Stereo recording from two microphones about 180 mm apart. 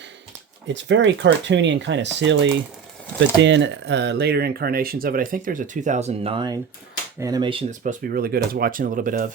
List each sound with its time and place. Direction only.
0.7 s speech: 90° right; by 7.6 s 25° right (ahead or behind)
7.7 s speech: 50° right (ahead or behind)